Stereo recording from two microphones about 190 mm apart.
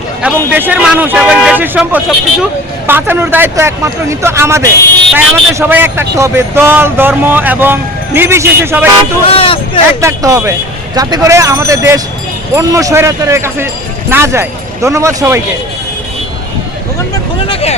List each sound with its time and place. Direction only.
0.2 s speech: 10° right (ahead or behind)
9.2 s speech: 30° left (ahead or behind)
10.0 s speech: 15° right (ahead or behind)
17.5 s speech: 35° left (ahead or behind)